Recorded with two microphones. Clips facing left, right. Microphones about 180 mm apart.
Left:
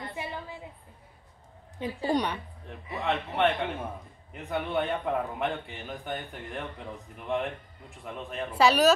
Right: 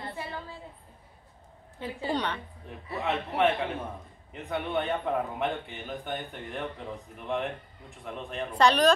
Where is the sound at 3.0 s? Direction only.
Centre (ahead or behind).